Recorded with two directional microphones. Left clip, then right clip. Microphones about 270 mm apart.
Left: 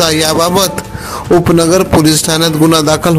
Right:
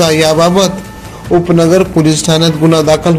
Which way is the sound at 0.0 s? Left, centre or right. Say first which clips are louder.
Right 2 dB; left.